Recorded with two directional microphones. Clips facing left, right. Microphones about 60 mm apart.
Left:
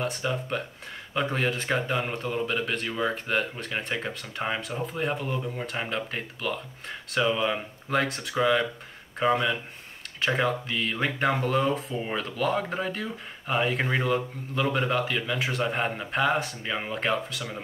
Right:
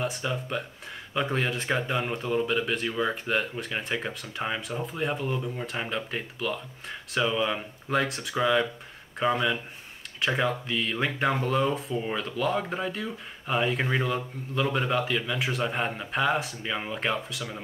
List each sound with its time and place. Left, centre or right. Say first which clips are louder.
0.0 s speech: left 1 dB; centre